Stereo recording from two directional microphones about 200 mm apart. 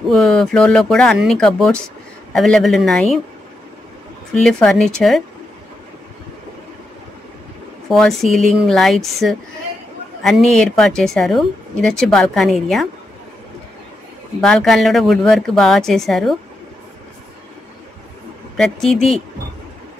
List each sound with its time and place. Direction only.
0.1 s a woman's voice: centre (ahead or behind)
4.3 s a woman's voice: 5° left (ahead or behind)
7.9 s a woman's voice: centre (ahead or behind)
14.4 s a woman's voice: 5° left (ahead or behind)
18.6 s a woman's voice: centre (ahead or behind)